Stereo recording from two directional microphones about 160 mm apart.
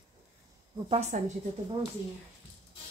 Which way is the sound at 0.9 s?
45° right (ahead or behind).